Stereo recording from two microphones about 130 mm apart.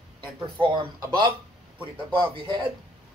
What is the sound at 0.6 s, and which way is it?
Speech, 40° right (ahead or behind).